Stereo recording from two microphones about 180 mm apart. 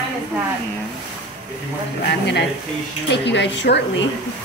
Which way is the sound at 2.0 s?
65° left (ahead or behind).